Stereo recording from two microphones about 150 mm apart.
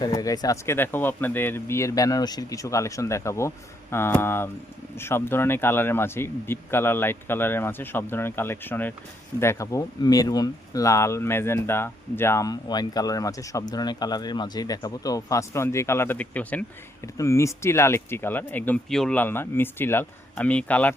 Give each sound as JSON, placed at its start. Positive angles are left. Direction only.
{"t": 0.0, "sound": "speech", "side_deg": 25}